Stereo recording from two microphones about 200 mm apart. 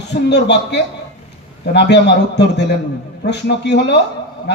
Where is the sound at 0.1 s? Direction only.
60° left (ahead or behind).